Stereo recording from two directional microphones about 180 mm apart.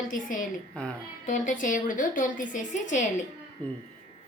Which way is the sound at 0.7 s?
5° left (ahead or behind).